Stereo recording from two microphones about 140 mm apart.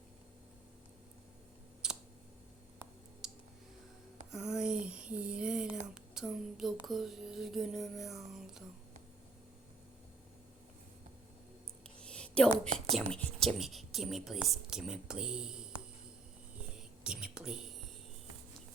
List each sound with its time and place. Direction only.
1.8 s computer keyboard: 5° right (ahead or behind)
3.2 s a sound: 5° right (ahead or behind)
11.9 s a sound: 5° left (ahead or behind)
12.6 s a woman's voice: 50° right (ahead or behind)
13.1 s a woman's voice: centre (ahead or behind)
16.7 s speech: 5° right (ahead or behind)